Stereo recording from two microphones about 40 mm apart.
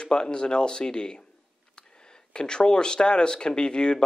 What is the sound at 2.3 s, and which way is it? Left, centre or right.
Speech, left.